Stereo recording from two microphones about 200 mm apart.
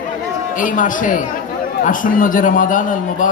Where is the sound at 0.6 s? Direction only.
40° left (ahead or behind).